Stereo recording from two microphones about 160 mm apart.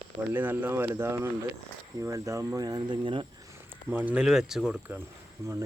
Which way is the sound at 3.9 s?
10° right (ahead or behind).